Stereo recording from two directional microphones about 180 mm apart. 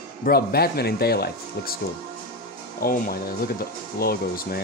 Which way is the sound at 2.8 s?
55° left (ahead or behind).